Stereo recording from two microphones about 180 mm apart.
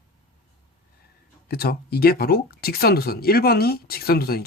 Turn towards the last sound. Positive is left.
turn(degrees=55)  # may be behind; listen again after turning